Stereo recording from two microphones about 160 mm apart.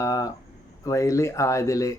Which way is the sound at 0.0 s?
20° left (ahead or behind).